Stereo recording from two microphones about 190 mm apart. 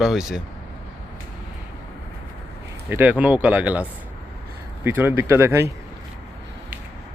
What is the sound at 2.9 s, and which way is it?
Speech, 10° right (ahead or behind).